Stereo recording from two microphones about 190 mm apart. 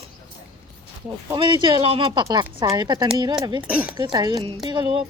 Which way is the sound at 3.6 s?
10° right (ahead or behind).